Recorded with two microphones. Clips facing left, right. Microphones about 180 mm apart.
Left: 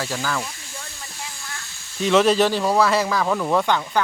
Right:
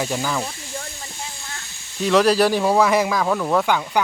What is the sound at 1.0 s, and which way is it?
Hiss, 25° right (ahead or behind).